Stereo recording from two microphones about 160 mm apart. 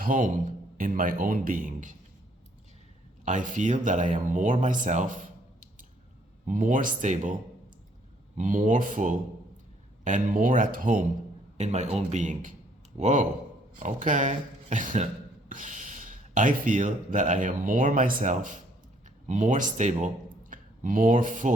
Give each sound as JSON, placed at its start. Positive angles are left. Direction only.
{"t": 0.0, "sound": "speech", "side_deg": -55}
{"t": 3.2, "sound": "speech", "side_deg": -50}
{"t": 8.4, "sound": "speech", "side_deg": -50}